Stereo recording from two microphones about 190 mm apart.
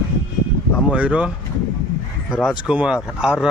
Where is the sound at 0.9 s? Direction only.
5° right (ahead or behind).